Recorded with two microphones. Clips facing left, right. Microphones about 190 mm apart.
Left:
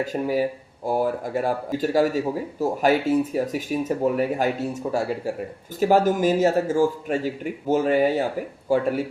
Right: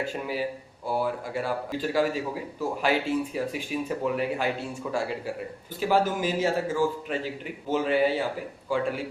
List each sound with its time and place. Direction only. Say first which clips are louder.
0.0 s a man's voice: left 7 dB; 40° left (ahead or behind)